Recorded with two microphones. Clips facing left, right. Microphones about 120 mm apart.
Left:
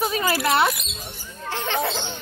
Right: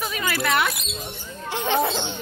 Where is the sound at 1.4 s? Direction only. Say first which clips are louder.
Right 3 dB; 15° right (ahead or behind).